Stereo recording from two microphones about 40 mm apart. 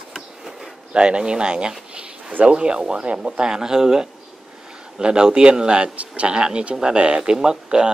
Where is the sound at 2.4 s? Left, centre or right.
Right.